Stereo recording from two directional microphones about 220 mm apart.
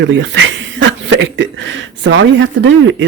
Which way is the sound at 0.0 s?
55° right (ahead or behind).